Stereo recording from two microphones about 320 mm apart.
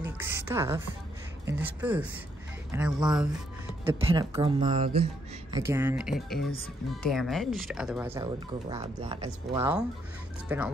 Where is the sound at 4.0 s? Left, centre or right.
Centre.